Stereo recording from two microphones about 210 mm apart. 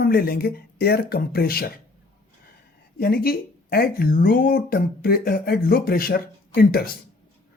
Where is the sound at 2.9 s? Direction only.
45° left (ahead or behind).